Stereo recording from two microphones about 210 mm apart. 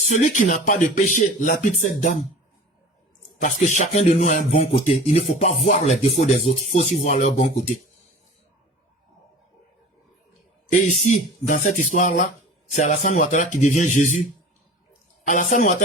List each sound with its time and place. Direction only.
0.1 s speech: 35° left (ahead or behind)
3.4 s speech: 35° left (ahead or behind)
10.7 s a man's voice: 35° left (ahead or behind)
15.3 s speech: 35° left (ahead or behind)